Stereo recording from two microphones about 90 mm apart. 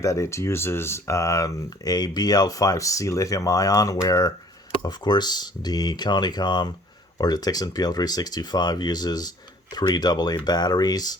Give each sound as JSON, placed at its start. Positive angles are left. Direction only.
{"t": 0.0, "sound": "speech", "side_deg": 35}